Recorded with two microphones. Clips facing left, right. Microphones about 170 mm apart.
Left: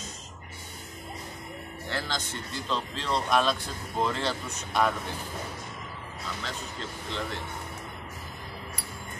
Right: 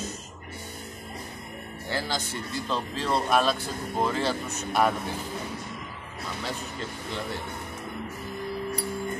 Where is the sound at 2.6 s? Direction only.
5° right (ahead or behind).